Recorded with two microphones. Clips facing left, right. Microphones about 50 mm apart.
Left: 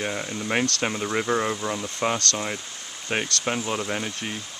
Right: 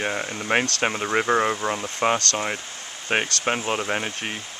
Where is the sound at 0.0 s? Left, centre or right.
Right.